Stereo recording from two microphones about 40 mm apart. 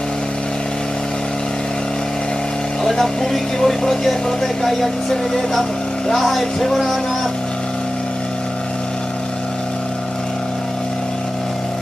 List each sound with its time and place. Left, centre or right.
2.8 s speech: centre